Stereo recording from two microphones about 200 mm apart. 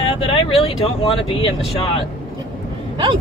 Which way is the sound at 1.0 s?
25° left (ahead or behind).